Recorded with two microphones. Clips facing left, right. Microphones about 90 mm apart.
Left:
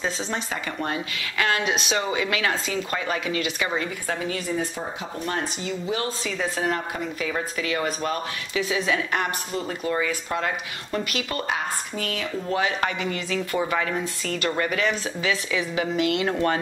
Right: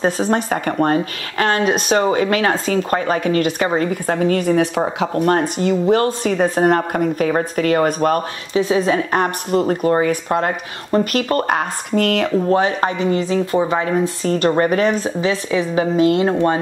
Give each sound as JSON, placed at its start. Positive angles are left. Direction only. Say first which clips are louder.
{"t": 0.0, "sound": "speech", "louder": "right 11 dB", "side_deg": -50}
{"t": 8.5, "sound": "speech", "louder": "right 9 dB", "side_deg": -35}
{"t": 9.5, "sound": "speech", "louder": "right 11 dB", "side_deg": -50}
{"t": 12.4, "sound": "speech", "louder": "right 8 dB", "side_deg": -35}